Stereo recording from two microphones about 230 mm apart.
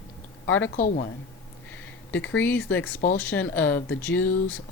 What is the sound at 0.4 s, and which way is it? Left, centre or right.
Speech, left.